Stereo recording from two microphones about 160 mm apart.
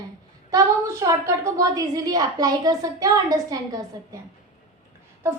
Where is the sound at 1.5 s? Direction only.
25° right (ahead or behind).